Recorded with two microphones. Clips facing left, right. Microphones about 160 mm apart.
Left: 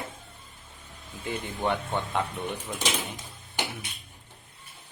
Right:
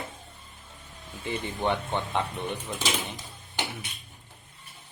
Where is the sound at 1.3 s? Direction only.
5° left (ahead or behind).